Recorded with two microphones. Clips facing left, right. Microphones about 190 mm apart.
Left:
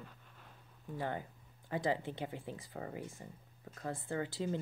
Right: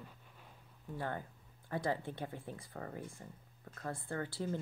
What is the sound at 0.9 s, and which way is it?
Speech, 15° left (ahead or behind).